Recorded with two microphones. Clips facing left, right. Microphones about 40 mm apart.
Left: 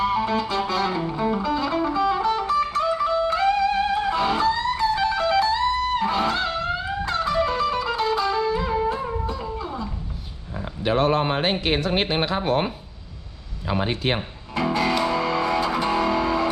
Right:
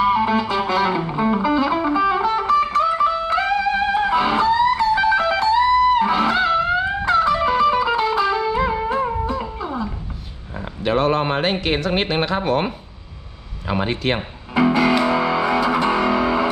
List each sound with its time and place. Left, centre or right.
0.0 s music: centre
9.4 s a sound: centre
10.8 s a sound: centre
11.6 s speech: centre
13.7 s speech: centre
14.2 s music: centre